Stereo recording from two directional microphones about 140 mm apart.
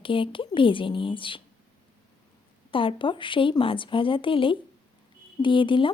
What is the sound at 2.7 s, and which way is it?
A woman's voice, 40° left (ahead or behind).